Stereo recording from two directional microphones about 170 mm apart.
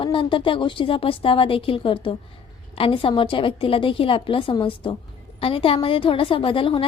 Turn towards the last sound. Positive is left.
turn(degrees=30)  # may be behind; listen again after turning